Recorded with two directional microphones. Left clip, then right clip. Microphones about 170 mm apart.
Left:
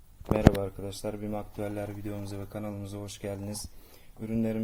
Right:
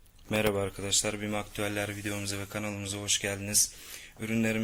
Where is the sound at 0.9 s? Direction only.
5° right (ahead or behind).